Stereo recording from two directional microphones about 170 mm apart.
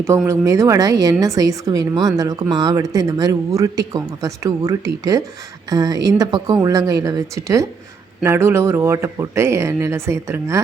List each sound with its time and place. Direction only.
0.3 s a woman's voice: 20° right (ahead or behind)